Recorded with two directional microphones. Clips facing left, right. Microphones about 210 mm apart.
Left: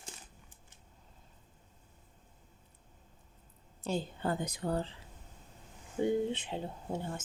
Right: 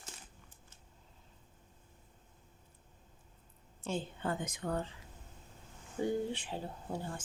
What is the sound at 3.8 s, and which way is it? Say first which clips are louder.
A woman's voice: left 3 dB; 40° left (ahead or behind).